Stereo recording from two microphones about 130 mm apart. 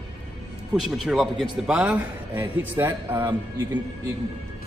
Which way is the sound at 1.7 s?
10° right (ahead or behind).